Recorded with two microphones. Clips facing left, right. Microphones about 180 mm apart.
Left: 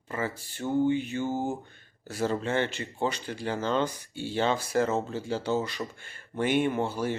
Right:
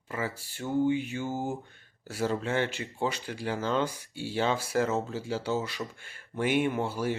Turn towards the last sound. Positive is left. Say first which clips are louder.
# left 1 dB
turn(degrees=-10)  # may be behind; listen again after turning